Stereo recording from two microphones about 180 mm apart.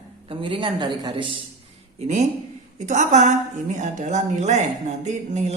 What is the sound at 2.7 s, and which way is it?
A woman's voice, 40° right (ahead or behind).